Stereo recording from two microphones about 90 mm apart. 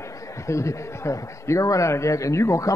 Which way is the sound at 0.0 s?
35° left (ahead or behind).